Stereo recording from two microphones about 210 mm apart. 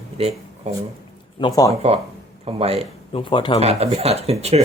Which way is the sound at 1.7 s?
30° right (ahead or behind).